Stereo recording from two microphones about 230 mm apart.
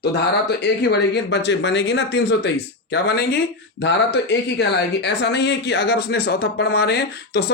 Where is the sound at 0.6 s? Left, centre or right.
Left.